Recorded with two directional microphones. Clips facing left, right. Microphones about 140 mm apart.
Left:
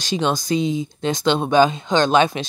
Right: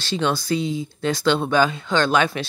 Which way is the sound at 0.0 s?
15° left (ahead or behind).